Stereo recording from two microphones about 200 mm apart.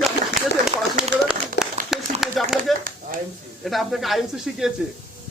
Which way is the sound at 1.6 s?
55° left (ahead or behind).